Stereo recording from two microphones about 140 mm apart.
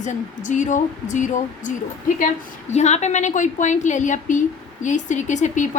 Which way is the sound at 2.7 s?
55° left (ahead or behind).